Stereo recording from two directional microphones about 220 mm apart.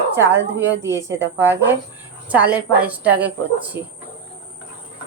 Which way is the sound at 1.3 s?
10° right (ahead or behind).